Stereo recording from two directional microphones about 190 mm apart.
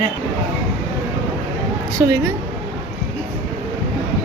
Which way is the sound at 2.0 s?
20° right (ahead or behind).